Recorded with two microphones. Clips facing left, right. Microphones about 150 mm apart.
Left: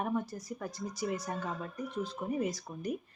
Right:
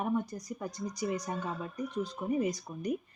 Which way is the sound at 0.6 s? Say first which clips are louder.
Right 1 dB; 15° right (ahead or behind).